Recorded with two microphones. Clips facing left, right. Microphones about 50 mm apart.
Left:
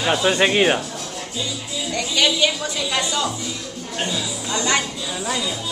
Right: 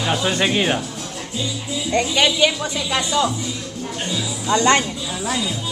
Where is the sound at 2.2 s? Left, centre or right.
Centre.